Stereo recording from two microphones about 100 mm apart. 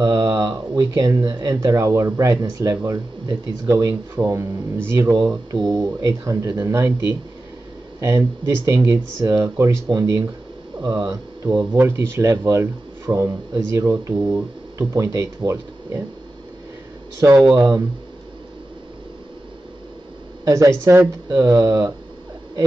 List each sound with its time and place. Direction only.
0.0 s speech: 40° right (ahead or behind)
1.7 s speech: 30° right (ahead or behind)
5.7 s speech: 40° right (ahead or behind)
8.0 s speech: 30° right (ahead or behind)
10.8 s speech: 45° right (ahead or behind)
11.7 s speech: 25° right (ahead or behind)
17.2 s speech: 30° right (ahead or behind)
20.4 s speech: 30° right (ahead or behind)
21.4 s speech: 35° right (ahead or behind)